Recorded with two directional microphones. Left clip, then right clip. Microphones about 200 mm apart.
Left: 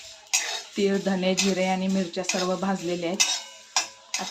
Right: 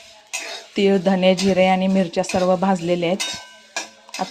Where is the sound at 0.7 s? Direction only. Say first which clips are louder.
Right 8 dB; 35° right (ahead or behind).